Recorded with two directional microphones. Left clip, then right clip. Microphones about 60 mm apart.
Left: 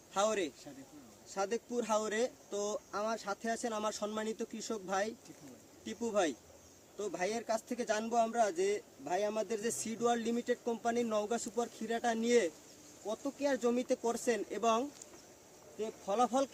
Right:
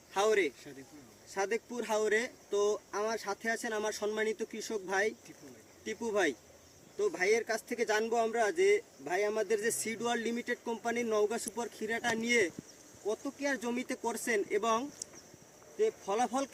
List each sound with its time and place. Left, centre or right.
0.1 s speech: left
1.3 s speech: left
13.6 s speech: left